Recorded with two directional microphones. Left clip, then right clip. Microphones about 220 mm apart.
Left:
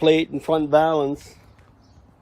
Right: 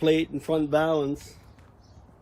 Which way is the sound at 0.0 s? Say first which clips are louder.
Left 5 dB; 40° left (ahead or behind).